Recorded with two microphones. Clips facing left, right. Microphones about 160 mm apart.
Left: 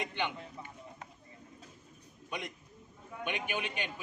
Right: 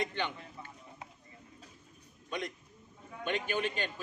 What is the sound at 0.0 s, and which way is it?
Speech, 15° left (ahead or behind).